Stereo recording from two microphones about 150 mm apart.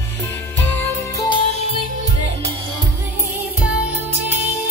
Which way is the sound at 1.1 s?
30° left (ahead or behind).